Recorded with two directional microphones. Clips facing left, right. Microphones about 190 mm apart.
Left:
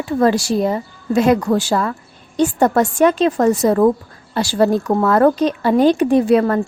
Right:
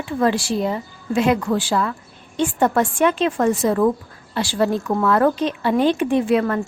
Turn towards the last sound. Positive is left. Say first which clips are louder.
# left 4 dB
turn(degrees=40)  # may be behind; listen again after turning